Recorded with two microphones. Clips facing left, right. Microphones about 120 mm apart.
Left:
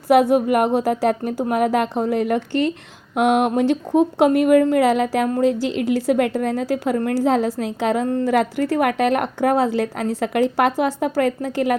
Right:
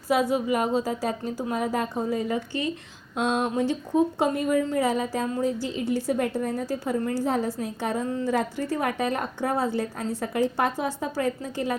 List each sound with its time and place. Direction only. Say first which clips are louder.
0.1 s a woman's voice: left 8 dB; 65° left (ahead or behind); by 8.0 s 85° left
8.0 s a woman's voice: left 7 dB; 60° left (ahead or behind)